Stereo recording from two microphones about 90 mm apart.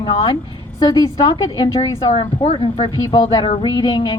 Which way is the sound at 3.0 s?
60° left (ahead or behind).